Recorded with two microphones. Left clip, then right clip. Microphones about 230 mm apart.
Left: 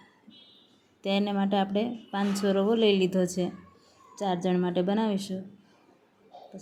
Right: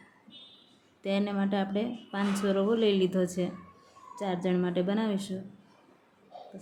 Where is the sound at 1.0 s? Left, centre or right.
Centre.